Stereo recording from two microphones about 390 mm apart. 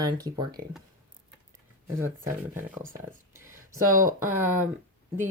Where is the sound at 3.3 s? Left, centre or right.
Centre.